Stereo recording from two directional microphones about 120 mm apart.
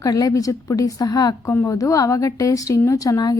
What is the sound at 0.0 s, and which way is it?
A woman's voice, 30° left (ahead or behind).